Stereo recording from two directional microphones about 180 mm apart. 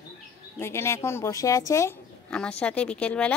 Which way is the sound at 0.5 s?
15° left (ahead or behind).